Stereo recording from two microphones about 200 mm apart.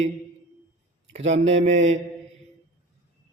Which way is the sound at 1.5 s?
35° right (ahead or behind).